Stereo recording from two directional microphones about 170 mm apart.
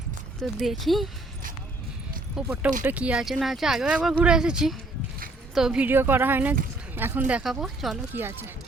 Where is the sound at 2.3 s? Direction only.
10° right (ahead or behind).